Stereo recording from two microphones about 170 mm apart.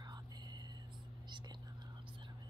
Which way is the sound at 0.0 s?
25° right (ahead or behind).